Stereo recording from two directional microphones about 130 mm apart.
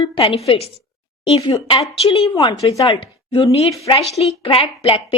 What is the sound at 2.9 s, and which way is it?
A woman's voice, 40° left (ahead or behind).